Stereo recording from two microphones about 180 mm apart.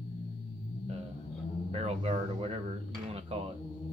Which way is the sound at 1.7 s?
35° right (ahead or behind).